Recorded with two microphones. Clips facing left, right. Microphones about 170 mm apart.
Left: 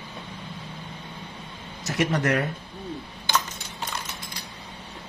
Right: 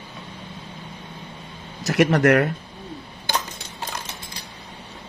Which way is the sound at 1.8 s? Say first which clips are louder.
Right 7 dB; 65° right (ahead or behind).